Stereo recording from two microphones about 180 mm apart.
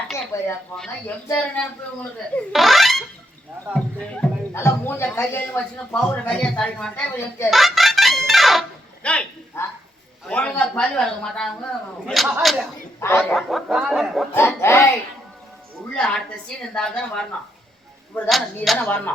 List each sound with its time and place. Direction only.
0.3 s a man's voice: 15° left (ahead or behind)
7.5 s fowl: centre (ahead or behind)
9.0 s a man's voice: 5° left (ahead or behind)
13.0 s speech: 15° left (ahead or behind)
13.3 s a man's voice: centre (ahead or behind)
14.3 s speech: 15° left (ahead or behind)
16.0 s a man's voice: 5° left (ahead or behind)
18.3 s a man's voice: centre (ahead or behind)